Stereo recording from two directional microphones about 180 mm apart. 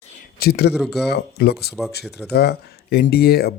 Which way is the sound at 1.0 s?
65° left (ahead or behind).